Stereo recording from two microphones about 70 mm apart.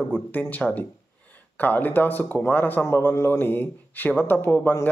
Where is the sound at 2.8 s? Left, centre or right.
Left.